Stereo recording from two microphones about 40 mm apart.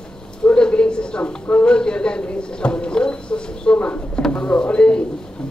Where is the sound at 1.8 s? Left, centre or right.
Left.